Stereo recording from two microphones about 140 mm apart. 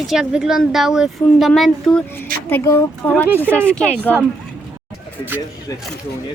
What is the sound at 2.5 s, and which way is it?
Speech, 20° left (ahead or behind).